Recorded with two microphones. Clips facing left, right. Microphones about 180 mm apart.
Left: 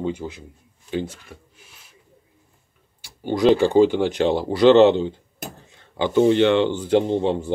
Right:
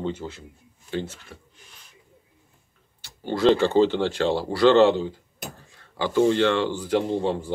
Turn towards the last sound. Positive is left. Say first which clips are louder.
# left 4 dB
turn(degrees=20)  # may be behind; listen again after turning